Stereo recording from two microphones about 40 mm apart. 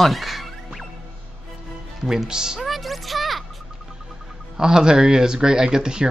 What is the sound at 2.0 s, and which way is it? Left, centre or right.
Speech, centre.